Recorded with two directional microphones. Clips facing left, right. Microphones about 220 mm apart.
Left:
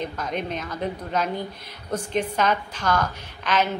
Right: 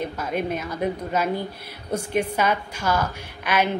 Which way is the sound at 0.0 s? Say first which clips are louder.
Right 2 dB; 10° right (ahead or behind).